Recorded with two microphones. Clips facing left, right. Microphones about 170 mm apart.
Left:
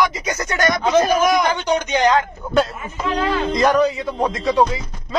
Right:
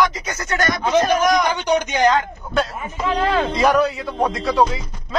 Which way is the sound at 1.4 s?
15° right (ahead or behind).